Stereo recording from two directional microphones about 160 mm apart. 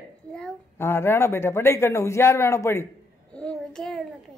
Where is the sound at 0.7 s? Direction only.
15° left (ahead or behind).